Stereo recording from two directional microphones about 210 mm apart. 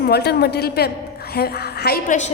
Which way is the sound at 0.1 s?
50° left (ahead or behind).